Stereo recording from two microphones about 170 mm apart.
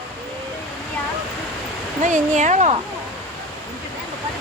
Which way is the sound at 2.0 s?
45° right (ahead or behind).